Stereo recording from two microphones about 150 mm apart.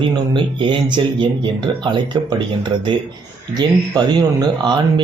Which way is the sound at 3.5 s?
30° right (ahead or behind).